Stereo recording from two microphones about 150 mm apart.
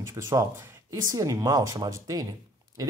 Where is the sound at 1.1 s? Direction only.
20° right (ahead or behind).